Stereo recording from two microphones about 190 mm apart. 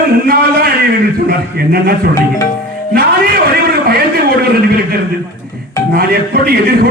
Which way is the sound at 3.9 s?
55° right (ahead or behind).